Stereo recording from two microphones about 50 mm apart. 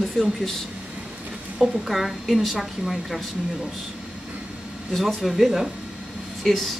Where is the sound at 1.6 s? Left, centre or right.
Centre.